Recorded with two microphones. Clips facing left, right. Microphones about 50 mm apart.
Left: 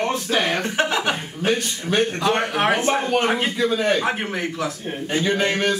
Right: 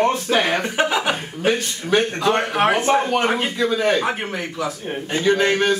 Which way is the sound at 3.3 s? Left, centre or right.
Centre.